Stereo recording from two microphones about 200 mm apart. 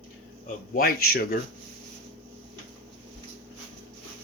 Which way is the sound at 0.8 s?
50° left (ahead or behind).